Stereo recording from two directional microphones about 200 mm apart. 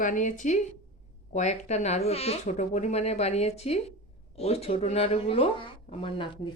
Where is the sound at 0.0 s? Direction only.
40° left (ahead or behind).